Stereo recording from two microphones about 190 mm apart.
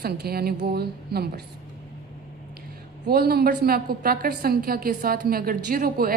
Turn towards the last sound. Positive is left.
turn(degrees=-50)  # may be behind; listen again after turning